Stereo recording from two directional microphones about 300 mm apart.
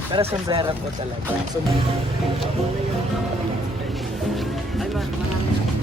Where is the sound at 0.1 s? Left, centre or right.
Centre.